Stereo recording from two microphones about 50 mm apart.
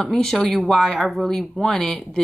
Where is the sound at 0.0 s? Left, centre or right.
Centre.